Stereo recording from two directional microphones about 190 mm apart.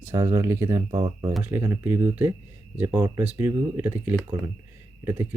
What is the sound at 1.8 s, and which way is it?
Speech, 10° right (ahead or behind).